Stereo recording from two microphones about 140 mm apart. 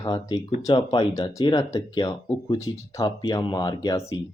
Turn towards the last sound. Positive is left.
turn(degrees=30)  # may be behind; listen again after turning